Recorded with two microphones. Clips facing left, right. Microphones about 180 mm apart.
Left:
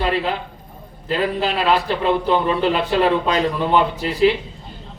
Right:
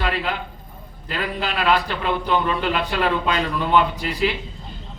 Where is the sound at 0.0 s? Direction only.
30° left (ahead or behind).